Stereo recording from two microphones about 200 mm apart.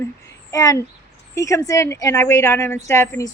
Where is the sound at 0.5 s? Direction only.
15° left (ahead or behind).